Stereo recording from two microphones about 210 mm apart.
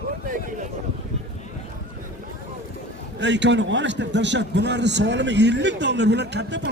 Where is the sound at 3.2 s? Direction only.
60° right (ahead or behind).